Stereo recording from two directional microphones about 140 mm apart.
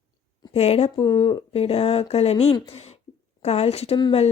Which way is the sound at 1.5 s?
45° left (ahead or behind).